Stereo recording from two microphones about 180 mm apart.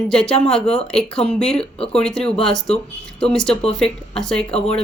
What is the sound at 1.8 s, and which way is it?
Speech, 35° left (ahead or behind).